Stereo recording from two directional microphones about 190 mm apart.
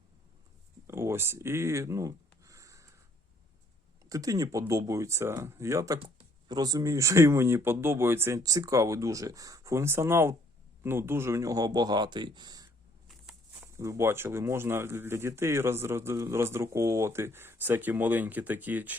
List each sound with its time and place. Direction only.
0.9 s speech: 15° right (ahead or behind)
4.1 s speech: 20° right (ahead or behind)
13.1 s a sound: centre (ahead or behind)
13.7 s speech: 15° right (ahead or behind)